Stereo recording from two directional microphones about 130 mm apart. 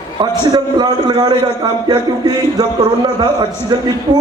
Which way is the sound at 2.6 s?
35° right (ahead or behind).